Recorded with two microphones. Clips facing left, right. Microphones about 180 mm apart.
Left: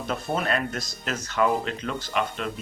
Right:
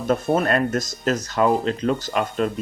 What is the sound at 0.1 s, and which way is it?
Speech, 45° right (ahead or behind).